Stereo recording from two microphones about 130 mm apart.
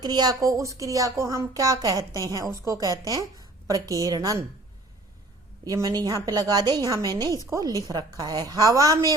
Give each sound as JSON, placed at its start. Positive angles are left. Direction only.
{"t": 0.0, "sound": "a woman's voice", "side_deg": -30}
{"t": 5.6, "sound": "a woman's voice", "side_deg": -25}